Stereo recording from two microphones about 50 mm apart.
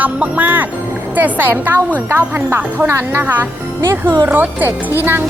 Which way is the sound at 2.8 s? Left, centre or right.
Right.